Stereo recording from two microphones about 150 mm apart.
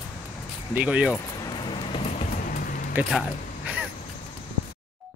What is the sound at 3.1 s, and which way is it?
Speech, 5° right (ahead or behind).